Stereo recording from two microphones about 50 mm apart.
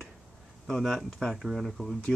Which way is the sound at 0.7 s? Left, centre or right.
Centre.